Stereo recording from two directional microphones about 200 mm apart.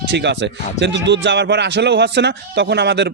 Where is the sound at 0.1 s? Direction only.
60° right (ahead or behind).